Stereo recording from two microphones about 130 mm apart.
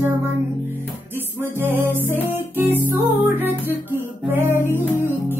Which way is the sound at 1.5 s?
15° right (ahead or behind).